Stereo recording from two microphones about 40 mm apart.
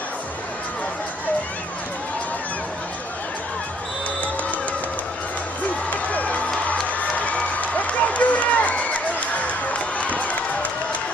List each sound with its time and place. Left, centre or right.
5.9 s run: left
6.7 s music: left
9.8 s crowd: left